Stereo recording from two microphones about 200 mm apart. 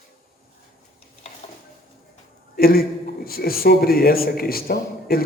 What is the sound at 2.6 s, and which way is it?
A man's voice, 50° left (ahead or behind).